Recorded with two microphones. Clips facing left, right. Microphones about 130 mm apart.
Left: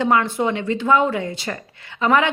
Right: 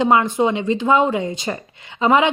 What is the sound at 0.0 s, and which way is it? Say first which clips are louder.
Speech: right 3 dB; 15° right (ahead or behind).